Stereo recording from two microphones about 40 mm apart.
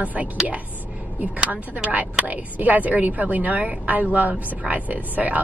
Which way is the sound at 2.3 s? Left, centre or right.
Right.